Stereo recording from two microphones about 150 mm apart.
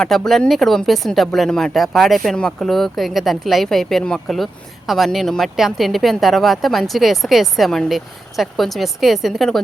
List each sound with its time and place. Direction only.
0.0 s speech: centre (ahead or behind)